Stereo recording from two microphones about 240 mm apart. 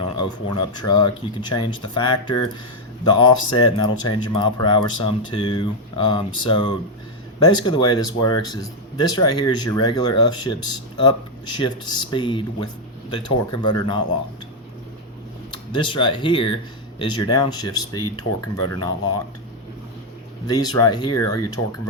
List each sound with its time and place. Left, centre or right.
0.2 s speech: centre
15.7 s speech: centre
20.5 s speech: centre